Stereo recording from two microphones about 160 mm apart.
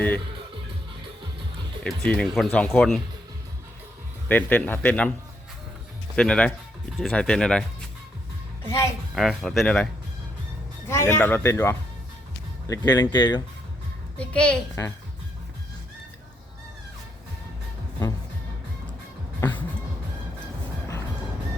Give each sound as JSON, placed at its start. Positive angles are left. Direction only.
{"t": 1.8, "sound": "speech", "side_deg": 5}
{"t": 4.3, "sound": "speech", "side_deg": 10}
{"t": 6.1, "sound": "speech", "side_deg": 5}
{"t": 8.6, "sound": "speech", "side_deg": 15}
{"t": 9.1, "sound": "speech", "side_deg": 0}
{"t": 10.8, "sound": "speech", "side_deg": 15}
{"t": 14.2, "sound": "speech", "side_deg": 5}
{"t": 19.4, "sound": "music", "side_deg": 10}